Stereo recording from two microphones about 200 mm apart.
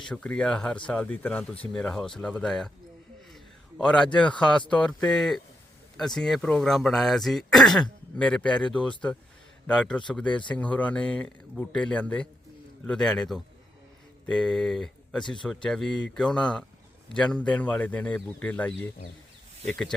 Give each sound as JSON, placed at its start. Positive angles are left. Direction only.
{"t": 0.0, "sound": "a man's voice", "side_deg": 5}